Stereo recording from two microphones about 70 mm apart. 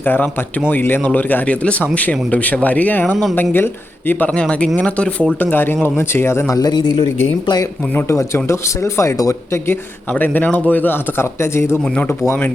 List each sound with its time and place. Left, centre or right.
0.0 s a man's voice: left
4.3 s speech: centre
5.4 s a man's voice: left
6.5 s a man's voice: left
7.9 s speech: left
10.1 s a man's voice: left